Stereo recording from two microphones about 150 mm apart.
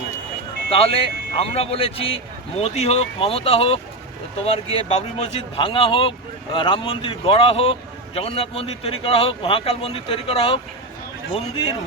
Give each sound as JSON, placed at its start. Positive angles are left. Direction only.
{"t": 0.7, "sound": "speech", "side_deg": 40}